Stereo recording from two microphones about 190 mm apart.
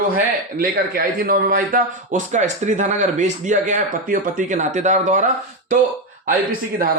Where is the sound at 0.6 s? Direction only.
50° right (ahead or behind).